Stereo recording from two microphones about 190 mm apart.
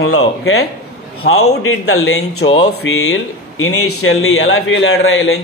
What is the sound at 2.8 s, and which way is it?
Speech, 75° left (ahead or behind).